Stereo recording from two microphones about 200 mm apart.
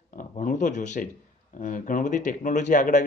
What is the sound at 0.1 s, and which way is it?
A man's voice, 40° left (ahead or behind).